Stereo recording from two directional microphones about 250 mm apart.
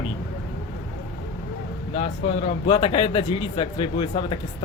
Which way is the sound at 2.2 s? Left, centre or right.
Left.